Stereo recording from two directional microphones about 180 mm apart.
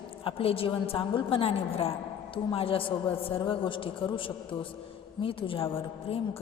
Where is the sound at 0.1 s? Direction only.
30° left (ahead or behind).